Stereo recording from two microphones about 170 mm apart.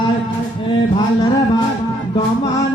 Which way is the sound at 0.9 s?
25° left (ahead or behind).